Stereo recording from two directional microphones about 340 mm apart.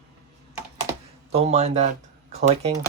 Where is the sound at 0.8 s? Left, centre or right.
Centre.